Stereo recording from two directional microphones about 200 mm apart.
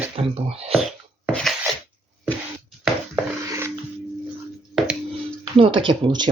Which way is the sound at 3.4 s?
15° right (ahead or behind).